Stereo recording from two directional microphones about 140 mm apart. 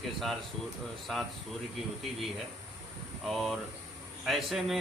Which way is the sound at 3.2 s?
Centre (ahead or behind).